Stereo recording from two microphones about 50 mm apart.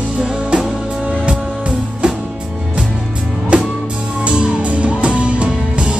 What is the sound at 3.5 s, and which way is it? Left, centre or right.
Music, right.